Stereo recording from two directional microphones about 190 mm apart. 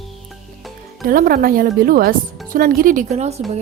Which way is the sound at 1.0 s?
50° right (ahead or behind).